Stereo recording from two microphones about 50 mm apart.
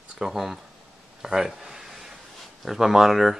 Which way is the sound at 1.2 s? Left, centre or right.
Centre.